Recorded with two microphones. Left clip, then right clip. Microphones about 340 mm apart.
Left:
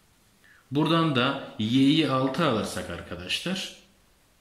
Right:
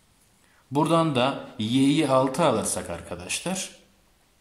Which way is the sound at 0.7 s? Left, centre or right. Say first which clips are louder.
Right 2 dB; centre.